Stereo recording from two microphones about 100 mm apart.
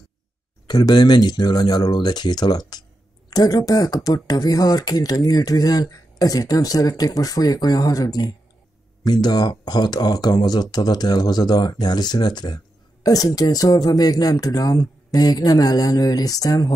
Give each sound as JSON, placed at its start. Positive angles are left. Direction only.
{"t": 0.7, "sound": "speech", "side_deg": 45}